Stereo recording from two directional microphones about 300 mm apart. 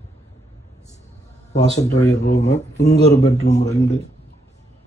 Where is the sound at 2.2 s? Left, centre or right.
Left.